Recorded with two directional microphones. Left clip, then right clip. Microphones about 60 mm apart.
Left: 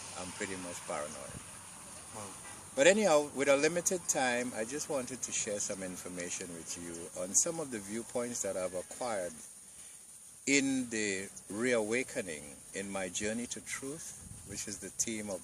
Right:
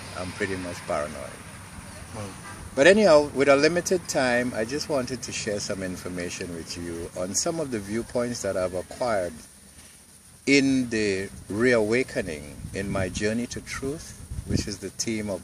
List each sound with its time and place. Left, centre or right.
0.1 s speech: left
2.7 s speech: left
10.4 s speech: left